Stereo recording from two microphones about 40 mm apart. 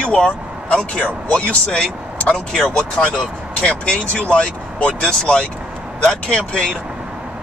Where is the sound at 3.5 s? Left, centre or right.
Left.